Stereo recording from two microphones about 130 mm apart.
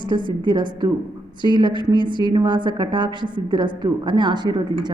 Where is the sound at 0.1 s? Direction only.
35° right (ahead or behind).